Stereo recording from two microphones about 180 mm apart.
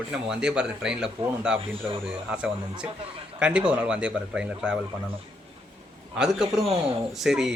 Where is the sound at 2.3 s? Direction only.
5° right (ahead or behind).